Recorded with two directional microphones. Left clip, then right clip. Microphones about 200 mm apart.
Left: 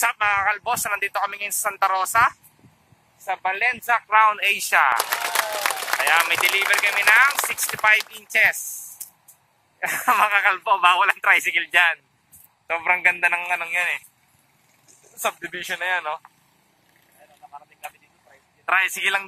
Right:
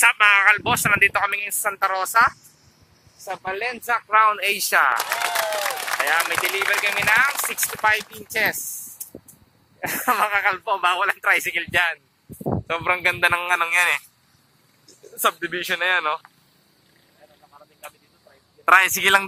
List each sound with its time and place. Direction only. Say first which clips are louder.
0.0 s speech: right 5 dB; centre (ahead or behind)
4.9 s applause: even; centre (ahead or behind)
6.7 s speech: left 1 dB; 15° right (ahead or behind)
8.3 s speech: left 4 dB; 25° right (ahead or behind)
9.8 s speech: left 2 dB; 15° right (ahead or behind)
12.6 s a man's voice: left 2 dB; 30° right (ahead or behind)
15.1 s speech: right 4 dB; 15° right (ahead or behind)
18.7 s a man's voice: right 5 dB; 35° right (ahead or behind)